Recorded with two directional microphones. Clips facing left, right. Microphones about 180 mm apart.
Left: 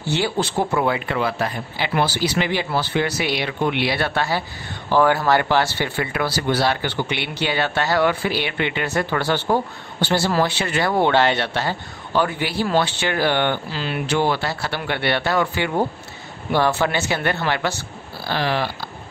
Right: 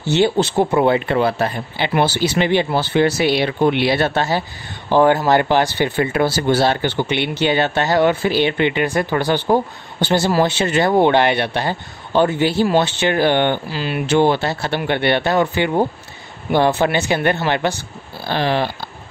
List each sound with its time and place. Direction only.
0.0 s speech: 20° right (ahead or behind)
14.0 s speech: 25° right (ahead or behind)